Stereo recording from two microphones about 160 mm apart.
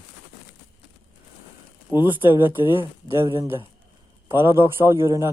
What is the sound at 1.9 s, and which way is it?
Speech, 5° right (ahead or behind).